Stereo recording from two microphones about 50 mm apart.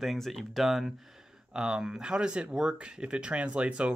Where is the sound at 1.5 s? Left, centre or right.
Centre.